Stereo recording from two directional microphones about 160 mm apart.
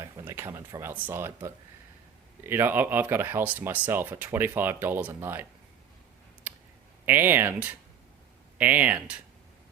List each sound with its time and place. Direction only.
0.0 s speech: 15° right (ahead or behind)
6.5 s clicking: 10° right (ahead or behind)
7.0 s speech: 10° right (ahead or behind)